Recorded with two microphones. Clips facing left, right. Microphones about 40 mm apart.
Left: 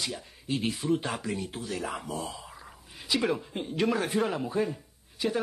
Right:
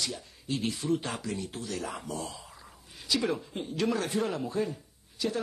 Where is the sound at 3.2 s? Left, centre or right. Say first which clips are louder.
Left 2 dB; centre.